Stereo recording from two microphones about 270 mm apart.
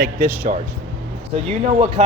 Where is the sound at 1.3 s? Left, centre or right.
Right.